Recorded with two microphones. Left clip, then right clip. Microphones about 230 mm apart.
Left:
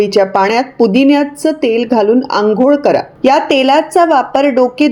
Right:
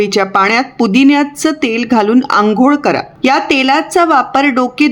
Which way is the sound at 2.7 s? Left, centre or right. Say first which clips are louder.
Left 3 dB; centre.